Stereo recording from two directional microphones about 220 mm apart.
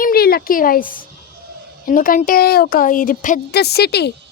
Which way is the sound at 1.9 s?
40° left (ahead or behind).